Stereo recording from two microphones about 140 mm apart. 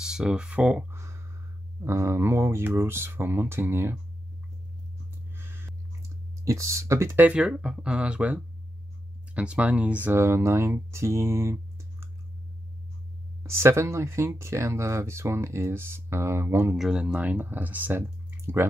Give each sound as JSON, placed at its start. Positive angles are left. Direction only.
{"t": 0.0, "sound": "speech", "side_deg": -5}
{"t": 0.9, "sound": "a sound", "side_deg": -20}
{"t": 1.9, "sound": "speech", "side_deg": -20}
{"t": 5.3, "sound": "hum", "side_deg": -15}
{"t": 6.4, "sound": "speech", "side_deg": -20}
{"t": 13.4, "sound": "speech", "side_deg": -20}
{"t": 16.7, "sound": "speech", "side_deg": -5}